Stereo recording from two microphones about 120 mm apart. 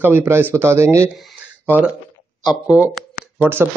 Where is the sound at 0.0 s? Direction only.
15° right (ahead or behind).